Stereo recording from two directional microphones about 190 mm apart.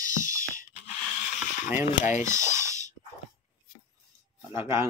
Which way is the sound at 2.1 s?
40° left (ahead or behind).